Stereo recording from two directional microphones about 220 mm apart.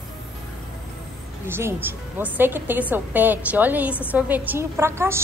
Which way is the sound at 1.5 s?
10° right (ahead or behind).